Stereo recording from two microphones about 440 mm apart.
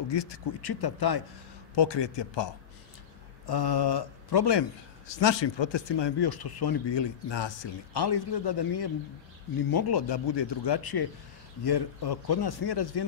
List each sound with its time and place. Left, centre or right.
0.1 s a man's voice: left
1.8 s a man's voice: left
3.4 s a man's voice: left